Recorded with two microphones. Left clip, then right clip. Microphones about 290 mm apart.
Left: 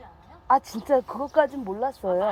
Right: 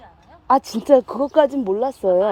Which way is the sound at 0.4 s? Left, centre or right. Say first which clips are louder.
Right 5 dB; right.